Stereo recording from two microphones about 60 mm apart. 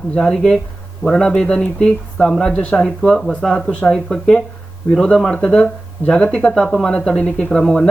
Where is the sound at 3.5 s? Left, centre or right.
Centre.